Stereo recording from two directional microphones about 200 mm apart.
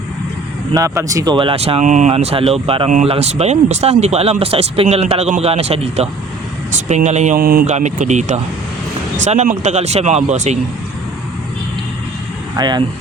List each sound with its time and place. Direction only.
0.7 s speech: 15° right (ahead or behind); by 10.6 s 35° right (ahead or behind)
12.5 s speech: 20° right (ahead or behind)